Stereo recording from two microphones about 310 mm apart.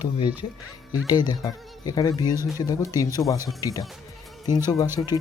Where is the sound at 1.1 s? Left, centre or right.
Centre.